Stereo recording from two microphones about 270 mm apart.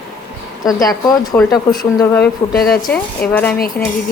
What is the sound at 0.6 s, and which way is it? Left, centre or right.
Speech, centre.